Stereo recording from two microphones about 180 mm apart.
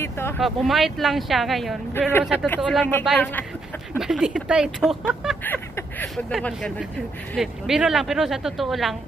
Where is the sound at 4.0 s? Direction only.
5° right (ahead or behind).